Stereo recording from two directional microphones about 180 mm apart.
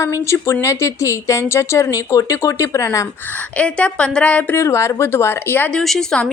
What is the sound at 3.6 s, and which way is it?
Speech, 5° left (ahead or behind).